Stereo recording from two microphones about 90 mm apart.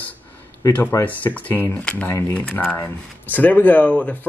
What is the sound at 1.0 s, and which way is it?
Speech, 20° left (ahead or behind).